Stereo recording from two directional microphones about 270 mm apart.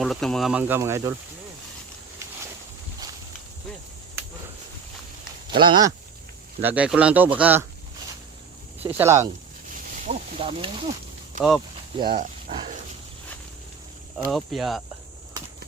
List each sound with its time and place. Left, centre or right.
0.0 s speech: centre
5.5 s speech: centre
6.6 s speech: centre
8.8 s speech: centre
9.7 s a sound: right
11.9 s a sound: right
14.3 s speech: centre